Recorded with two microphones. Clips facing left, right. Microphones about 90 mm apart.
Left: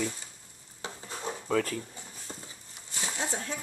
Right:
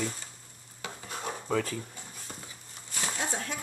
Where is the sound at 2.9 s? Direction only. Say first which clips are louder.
Right 1 dB; 25° left (ahead or behind).